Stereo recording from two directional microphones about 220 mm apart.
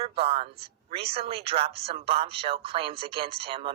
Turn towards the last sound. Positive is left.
turn(degrees=-25)  # may be behind; listen again after turning